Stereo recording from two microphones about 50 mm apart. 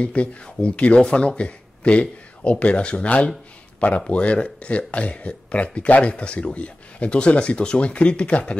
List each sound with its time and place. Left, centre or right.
0.0 s speech: left